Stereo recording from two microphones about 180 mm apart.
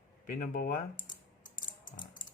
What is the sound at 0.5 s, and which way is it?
Speech, 50° left (ahead or behind).